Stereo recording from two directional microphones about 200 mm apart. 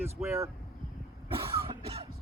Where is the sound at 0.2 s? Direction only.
5° right (ahead or behind).